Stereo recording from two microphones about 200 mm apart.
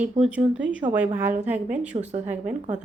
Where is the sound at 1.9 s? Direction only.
35° right (ahead or behind).